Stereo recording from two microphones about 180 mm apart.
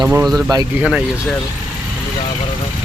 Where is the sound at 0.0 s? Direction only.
15° right (ahead or behind).